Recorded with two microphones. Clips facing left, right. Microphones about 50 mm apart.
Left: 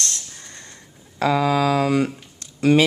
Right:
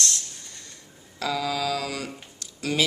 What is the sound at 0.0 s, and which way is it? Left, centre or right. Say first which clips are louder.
Snort: even; left.